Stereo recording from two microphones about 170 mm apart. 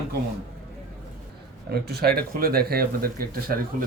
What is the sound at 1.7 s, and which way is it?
Speech, 70° right (ahead or behind).